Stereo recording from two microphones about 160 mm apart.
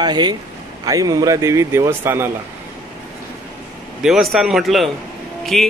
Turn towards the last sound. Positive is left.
turn(degrees=0)  # may be behind; listen again after turning